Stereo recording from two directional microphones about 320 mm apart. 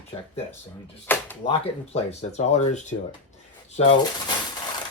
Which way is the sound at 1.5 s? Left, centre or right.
Centre.